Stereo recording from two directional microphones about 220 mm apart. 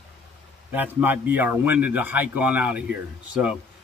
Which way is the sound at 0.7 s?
5° right (ahead or behind).